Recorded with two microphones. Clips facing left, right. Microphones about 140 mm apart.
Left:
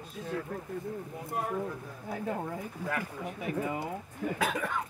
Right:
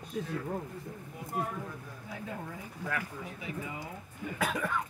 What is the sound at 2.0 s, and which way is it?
Speech, 50° left (ahead or behind).